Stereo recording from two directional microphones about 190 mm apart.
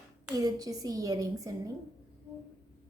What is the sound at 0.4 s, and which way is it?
A woman's voice, 20° right (ahead or behind).